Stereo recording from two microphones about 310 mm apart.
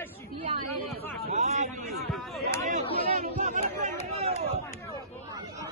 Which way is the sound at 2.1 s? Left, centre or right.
Centre.